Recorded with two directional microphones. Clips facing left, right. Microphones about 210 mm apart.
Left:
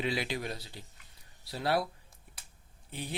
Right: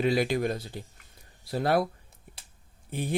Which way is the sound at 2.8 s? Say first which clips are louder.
Right 8 dB; 50° right (ahead or behind).